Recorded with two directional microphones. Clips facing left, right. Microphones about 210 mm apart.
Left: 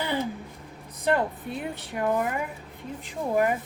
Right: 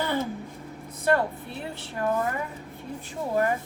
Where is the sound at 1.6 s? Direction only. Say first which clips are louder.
Even; 15° left (ahead or behind).